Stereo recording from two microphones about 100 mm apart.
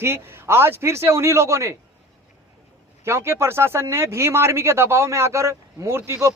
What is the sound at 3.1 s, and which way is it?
Speech, 25° right (ahead or behind).